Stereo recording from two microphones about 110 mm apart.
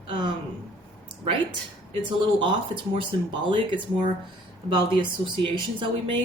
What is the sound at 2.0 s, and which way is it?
Speech, 45° right (ahead or behind).